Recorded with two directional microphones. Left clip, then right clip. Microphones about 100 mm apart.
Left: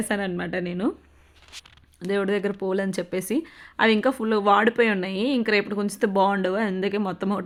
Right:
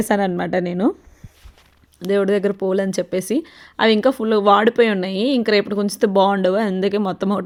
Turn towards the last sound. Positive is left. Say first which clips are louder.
# right 6 dB
turn(degrees=-35)  # may be behind; listen again after turning